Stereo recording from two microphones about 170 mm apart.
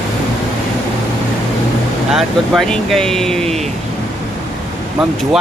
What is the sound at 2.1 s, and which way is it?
Speech, centre (ahead or behind).